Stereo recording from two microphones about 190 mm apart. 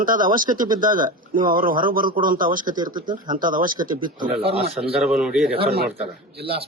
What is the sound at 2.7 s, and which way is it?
Speech, 20° right (ahead or behind).